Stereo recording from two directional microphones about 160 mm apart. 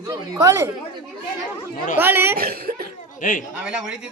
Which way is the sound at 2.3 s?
70° right (ahead or behind).